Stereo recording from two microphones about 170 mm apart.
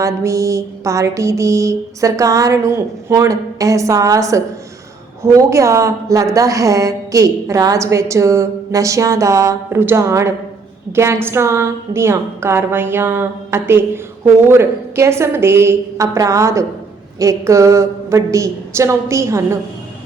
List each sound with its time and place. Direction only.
0.0 s mantra: 20° right (ahead or behind)
5.2 s a woman's voice: 20° right (ahead or behind)